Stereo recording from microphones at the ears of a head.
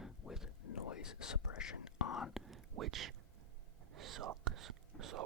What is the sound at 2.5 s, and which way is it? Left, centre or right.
Whispering, right.